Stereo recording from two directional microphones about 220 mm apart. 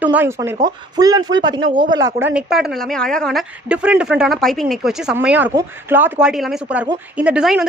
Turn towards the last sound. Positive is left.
turn(degrees=-5)  # may be behind; listen again after turning